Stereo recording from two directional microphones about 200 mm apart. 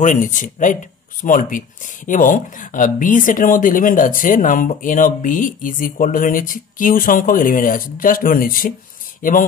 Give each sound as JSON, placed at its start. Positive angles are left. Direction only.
{"t": 0.0, "sound": "speech", "side_deg": 40}